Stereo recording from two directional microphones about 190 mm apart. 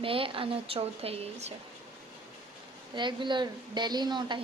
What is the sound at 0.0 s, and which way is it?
A woman's voice, 30° right (ahead or behind).